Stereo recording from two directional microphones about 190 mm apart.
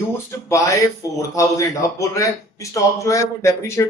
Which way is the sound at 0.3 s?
15° left (ahead or behind).